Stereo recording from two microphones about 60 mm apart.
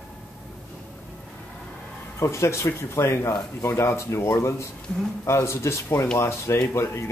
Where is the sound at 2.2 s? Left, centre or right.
Left.